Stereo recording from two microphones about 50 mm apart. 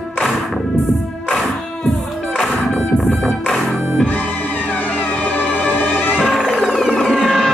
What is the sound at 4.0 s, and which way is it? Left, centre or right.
Music, left.